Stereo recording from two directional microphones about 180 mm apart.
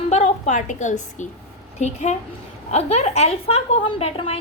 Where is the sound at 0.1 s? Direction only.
40° left (ahead or behind).